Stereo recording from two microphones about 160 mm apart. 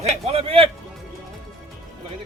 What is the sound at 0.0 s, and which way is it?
Music, 40° right (ahead or behind).